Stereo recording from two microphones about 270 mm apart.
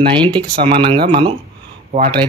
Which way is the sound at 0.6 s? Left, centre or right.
Centre.